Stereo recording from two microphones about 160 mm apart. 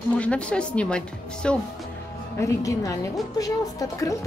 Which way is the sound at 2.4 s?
20° left (ahead or behind).